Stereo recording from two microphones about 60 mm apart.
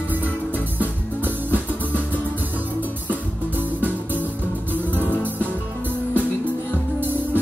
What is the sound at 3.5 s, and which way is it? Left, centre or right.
Music, right.